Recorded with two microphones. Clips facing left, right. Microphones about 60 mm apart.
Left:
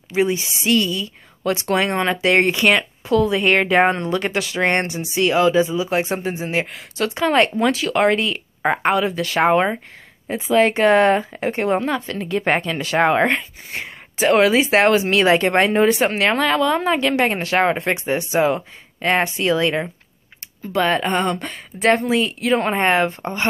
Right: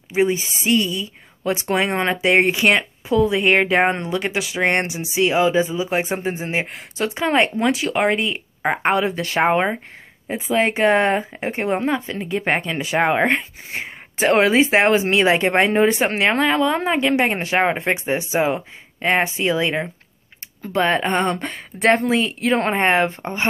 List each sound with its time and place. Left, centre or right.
0.1 s speech: right
8.9 s speech: right
9.4 s speech: right
13.3 s speech: right
14.1 s speech: right
14.7 s speech: right
20.7 s speech: right